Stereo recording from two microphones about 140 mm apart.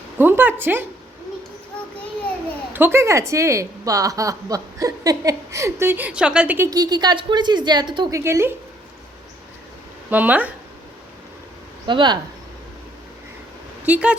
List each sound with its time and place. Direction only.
0.2 s speech: 15° right (ahead or behind)
2.7 s a woman's voice: 15° right (ahead or behind)
6.7 s a woman's voice: 30° right (ahead or behind)
8.1 s a woman's voice: 20° right (ahead or behind)
10.1 s speech: 10° right (ahead or behind)
11.9 s a woman's voice: 35° right (ahead or behind)
13.8 s speech: 10° right (ahead or behind)